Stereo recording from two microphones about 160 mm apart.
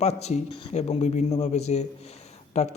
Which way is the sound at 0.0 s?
45° left (ahead or behind).